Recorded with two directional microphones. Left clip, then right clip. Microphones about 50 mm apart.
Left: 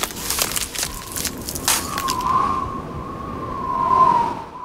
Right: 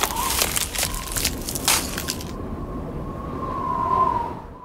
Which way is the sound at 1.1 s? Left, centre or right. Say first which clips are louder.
Right 1 dB; right.